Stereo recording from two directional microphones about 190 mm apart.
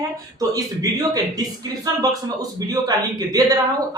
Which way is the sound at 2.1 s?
20° right (ahead or behind).